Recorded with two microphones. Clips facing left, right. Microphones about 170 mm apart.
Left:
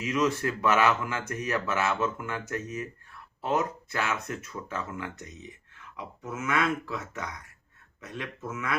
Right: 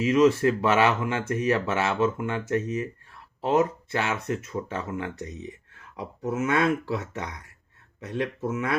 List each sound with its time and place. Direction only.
0.0 s speech: 30° right (ahead or behind)